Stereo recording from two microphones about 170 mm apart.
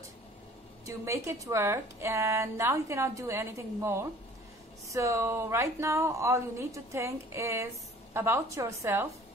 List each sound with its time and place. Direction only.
0.8 s a woman's voice: 15° right (ahead or behind)